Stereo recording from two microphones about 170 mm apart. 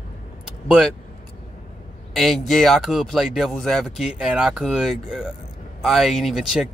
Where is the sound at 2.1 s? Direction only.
Centre (ahead or behind).